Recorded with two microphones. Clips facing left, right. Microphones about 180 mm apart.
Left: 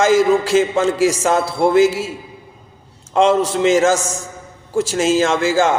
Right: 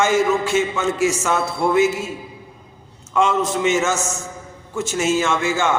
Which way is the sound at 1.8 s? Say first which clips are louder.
Left 4 dB; 90° left.